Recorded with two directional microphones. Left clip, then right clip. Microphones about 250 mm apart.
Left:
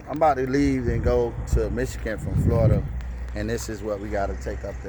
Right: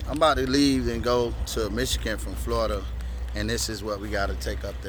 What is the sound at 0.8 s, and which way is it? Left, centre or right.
Speech, centre.